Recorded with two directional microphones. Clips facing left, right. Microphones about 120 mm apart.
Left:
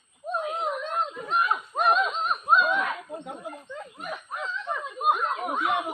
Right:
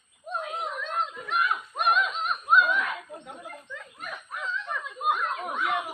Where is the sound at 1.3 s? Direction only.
30° left (ahead or behind).